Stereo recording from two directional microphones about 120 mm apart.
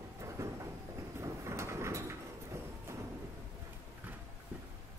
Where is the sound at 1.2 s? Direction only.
25° right (ahead or behind).